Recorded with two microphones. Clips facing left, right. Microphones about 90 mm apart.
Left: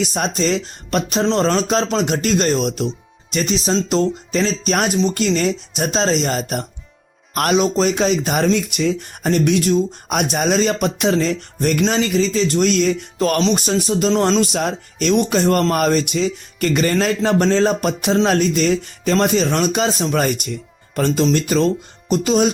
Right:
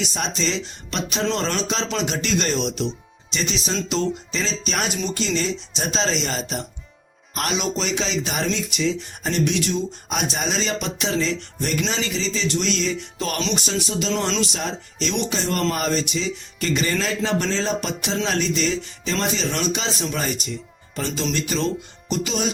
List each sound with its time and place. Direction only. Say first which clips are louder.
0.1 s speech: left 6 dB; 45° left (ahead or behind)